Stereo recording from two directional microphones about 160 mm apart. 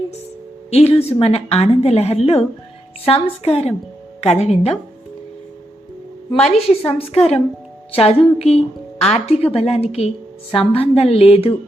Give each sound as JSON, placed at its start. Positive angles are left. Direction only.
{"t": 0.7, "sound": "a woman's voice", "side_deg": 40}
{"t": 6.3, "sound": "a woman's voice", "side_deg": 5}
{"t": 7.9, "sound": "a woman's voice", "side_deg": 40}